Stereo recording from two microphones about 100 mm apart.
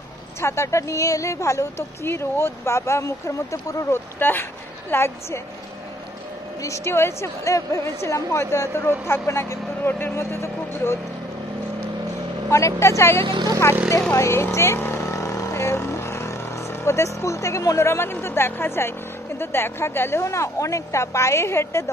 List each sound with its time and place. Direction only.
0.4 s a woman's voice: 25° left (ahead or behind)
6.6 s a woman's voice: 30° left (ahead or behind)
12.4 s a woman's voice: 30° left (ahead or behind)